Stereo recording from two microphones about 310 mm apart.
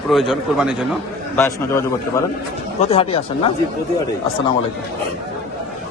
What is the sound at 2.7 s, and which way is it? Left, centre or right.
Speech, centre.